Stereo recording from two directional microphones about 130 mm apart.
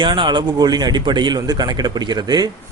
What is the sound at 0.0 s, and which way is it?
A man's voice, 35° right (ahead or behind).